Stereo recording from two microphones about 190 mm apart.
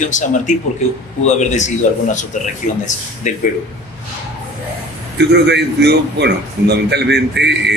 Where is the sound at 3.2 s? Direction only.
40° left (ahead or behind).